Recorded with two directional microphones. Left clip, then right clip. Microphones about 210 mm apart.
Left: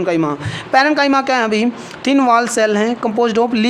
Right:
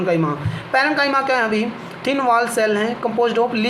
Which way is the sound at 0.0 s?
50° left (ahead or behind).